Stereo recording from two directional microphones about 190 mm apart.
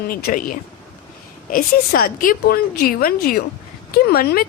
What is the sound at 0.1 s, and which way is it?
Speech, 50° left (ahead or behind).